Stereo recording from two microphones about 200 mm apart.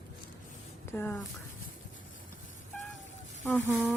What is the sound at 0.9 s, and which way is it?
Speech, 10° left (ahead or behind).